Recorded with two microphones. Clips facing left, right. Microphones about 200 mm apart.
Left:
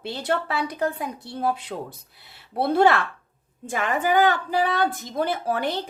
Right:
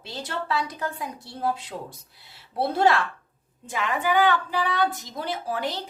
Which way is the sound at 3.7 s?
50° left (ahead or behind).